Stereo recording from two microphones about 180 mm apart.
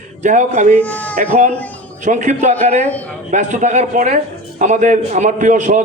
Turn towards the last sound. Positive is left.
turn(degrees=-45)  # may be behind; listen again after turning